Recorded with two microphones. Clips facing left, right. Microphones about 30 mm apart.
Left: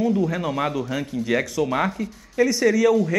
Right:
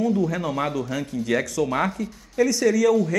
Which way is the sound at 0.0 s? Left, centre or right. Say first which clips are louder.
Left 1 dB; centre.